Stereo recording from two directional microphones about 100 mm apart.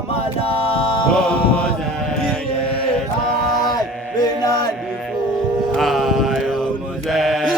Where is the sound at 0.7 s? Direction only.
60° left (ahead or behind).